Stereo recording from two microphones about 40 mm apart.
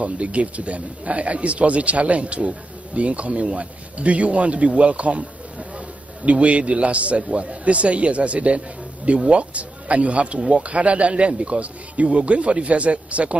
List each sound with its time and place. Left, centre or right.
0.0 s a man's voice: right
6.2 s a man's voice: right